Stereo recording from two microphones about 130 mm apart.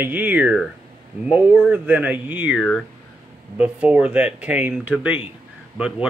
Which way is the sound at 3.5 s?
10° right (ahead or behind).